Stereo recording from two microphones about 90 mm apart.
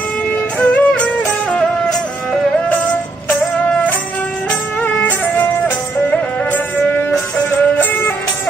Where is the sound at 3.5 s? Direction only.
10° left (ahead or behind).